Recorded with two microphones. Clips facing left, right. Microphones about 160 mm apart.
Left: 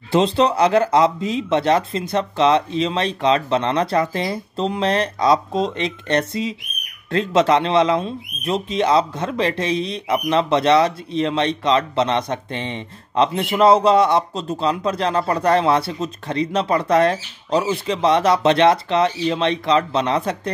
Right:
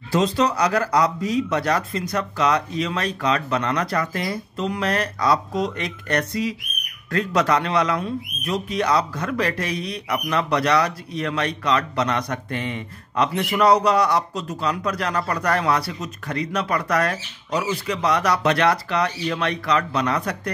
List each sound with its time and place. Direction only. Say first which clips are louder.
0.1 s speech: left 3 dB; 25° left (ahead or behind)